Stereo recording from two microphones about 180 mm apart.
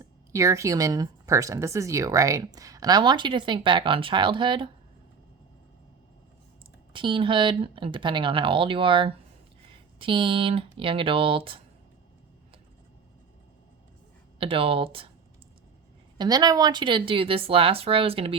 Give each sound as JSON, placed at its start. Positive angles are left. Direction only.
{"t": 0.0, "sound": "a woman's voice", "side_deg": -15}
{"t": 6.9, "sound": "a woman's voice", "side_deg": -25}
{"t": 14.3, "sound": "a woman's voice", "side_deg": -30}
{"t": 16.1, "sound": "speech", "side_deg": -20}